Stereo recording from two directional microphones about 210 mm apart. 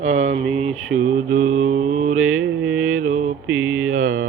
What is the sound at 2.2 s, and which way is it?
Mantra, 75° right (ahead or behind).